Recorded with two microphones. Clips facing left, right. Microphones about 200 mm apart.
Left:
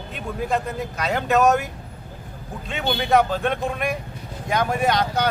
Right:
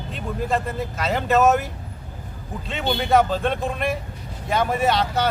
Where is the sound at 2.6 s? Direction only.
Centre (ahead or behind).